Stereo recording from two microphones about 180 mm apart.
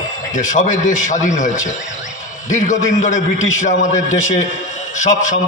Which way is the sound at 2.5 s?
45° left (ahead or behind).